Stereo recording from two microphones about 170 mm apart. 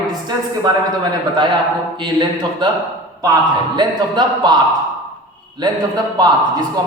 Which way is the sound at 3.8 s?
25° right (ahead or behind).